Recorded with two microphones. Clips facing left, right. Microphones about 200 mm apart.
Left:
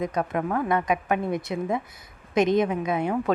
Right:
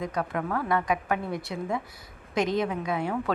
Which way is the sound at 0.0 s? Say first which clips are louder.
Left 4 dB; 20° left (ahead or behind).